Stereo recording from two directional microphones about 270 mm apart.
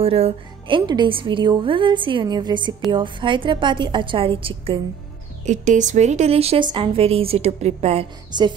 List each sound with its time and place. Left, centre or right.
0.0 s a woman's voice: right